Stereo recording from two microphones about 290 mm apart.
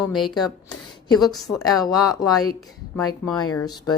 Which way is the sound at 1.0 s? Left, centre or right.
Centre.